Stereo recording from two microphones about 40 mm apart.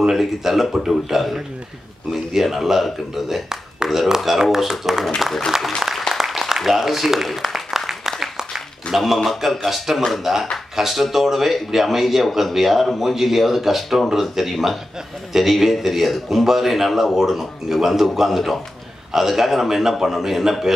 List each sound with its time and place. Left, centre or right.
0.1 s a man's voice: centre
2.4 s a man's voice: centre
3.4 s a sound: centre
4.4 s a man's voice: centre
5.8 s a sound: centre
8.2 s applause: centre
8.9 s a man's voice: centre